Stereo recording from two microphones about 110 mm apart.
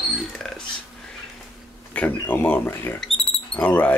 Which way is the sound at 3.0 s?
5° left (ahead or behind).